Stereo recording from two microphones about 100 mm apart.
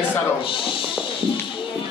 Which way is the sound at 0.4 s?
60° left (ahead or behind).